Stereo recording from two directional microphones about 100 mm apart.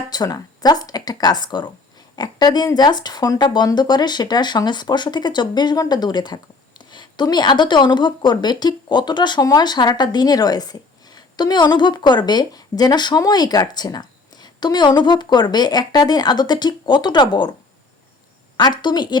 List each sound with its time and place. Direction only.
0.1 s a woman's voice: 40° left (ahead or behind)
18.5 s a woman's voice: 45° left (ahead or behind)